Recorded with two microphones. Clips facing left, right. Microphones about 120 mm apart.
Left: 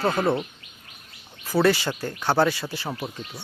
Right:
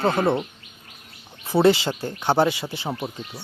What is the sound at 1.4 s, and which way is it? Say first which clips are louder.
Speech: right 3 dB; 25° right (ahead or behind).